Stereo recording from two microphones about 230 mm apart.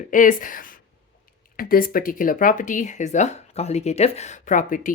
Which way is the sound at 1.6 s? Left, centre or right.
Left.